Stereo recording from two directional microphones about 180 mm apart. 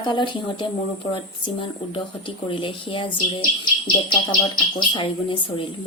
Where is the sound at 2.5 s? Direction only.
30° left (ahead or behind).